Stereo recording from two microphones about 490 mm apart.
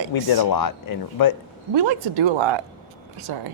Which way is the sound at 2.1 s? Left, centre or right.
Right.